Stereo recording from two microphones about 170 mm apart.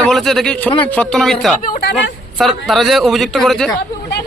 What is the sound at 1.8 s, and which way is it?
Speech, 80° left.